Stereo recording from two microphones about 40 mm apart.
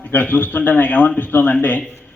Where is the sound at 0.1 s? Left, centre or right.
Left.